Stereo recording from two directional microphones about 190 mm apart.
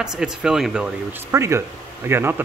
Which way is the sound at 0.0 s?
5° right (ahead or behind).